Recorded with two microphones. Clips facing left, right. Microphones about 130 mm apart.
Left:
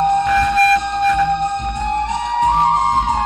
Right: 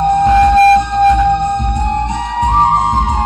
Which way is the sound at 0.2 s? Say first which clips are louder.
Right 7 dB; 30° right (ahead or behind).